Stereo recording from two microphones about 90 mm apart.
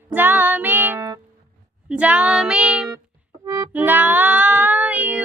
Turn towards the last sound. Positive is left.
turn(degrees=-15)  # may be behind; listen again after turning